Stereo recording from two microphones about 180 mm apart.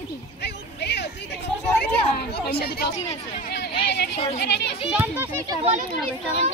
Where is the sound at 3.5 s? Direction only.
70° left (ahead or behind).